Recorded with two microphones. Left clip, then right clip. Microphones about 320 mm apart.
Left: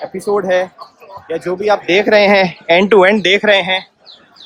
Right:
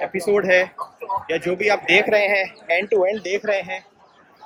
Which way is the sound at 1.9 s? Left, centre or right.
Left.